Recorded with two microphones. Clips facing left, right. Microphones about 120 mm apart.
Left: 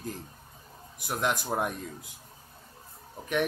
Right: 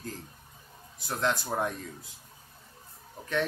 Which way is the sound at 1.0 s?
15° left (ahead or behind).